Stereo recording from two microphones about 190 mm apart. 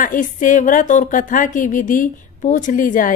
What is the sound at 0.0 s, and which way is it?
A woman's voice, 45° left (ahead or behind).